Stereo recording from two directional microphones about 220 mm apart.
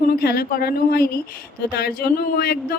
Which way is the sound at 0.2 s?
45° left (ahead or behind).